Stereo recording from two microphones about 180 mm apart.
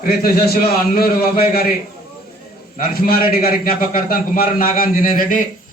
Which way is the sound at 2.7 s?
55° left (ahead or behind).